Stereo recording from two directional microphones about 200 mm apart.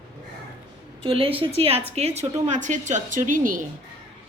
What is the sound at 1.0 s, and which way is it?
A woman's voice, 25° right (ahead or behind).